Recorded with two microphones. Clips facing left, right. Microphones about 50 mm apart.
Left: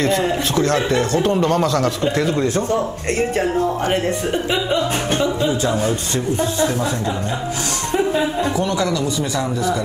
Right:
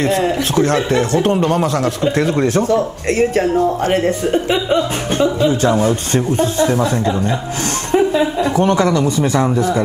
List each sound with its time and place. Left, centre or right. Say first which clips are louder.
0.6 s a man's voice: right 3 dB; right
1.4 s speech: right 1 dB; right
2.1 s speech: right 3 dB; right
3.8 s a man's voice: right 4 dB; right
5.7 s speech: right 5 dB; right
6.1 s a man's voice: right 5 dB; right
8.4 s a man's voice: right 5 dB; right